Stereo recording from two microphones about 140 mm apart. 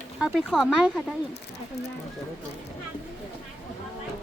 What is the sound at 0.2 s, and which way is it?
Speech, 5° right (ahead or behind).